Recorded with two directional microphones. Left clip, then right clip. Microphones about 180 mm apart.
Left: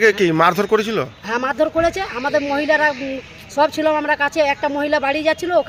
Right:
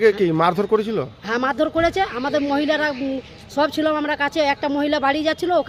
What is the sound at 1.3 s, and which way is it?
Speech, 35° right (ahead or behind).